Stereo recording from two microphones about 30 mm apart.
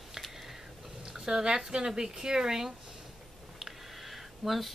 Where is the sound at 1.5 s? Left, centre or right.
Centre.